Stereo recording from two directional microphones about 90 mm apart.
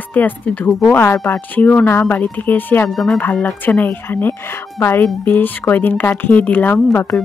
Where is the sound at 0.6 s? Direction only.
Centre (ahead or behind).